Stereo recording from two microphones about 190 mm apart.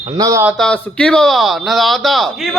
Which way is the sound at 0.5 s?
5° left (ahead or behind).